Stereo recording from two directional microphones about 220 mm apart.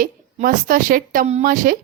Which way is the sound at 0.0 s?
40° right (ahead or behind).